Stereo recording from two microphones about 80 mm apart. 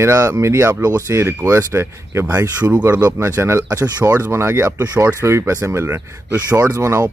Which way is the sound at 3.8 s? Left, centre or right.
Right.